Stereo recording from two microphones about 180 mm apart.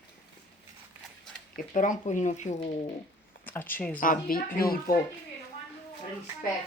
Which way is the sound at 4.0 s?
50° left (ahead or behind).